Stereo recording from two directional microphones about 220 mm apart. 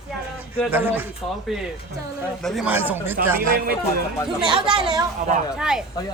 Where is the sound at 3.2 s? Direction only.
40° right (ahead or behind).